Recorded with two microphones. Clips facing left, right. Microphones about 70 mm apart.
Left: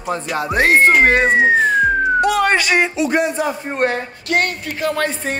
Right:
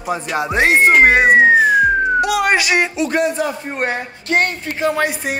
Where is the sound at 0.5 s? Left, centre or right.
Centre.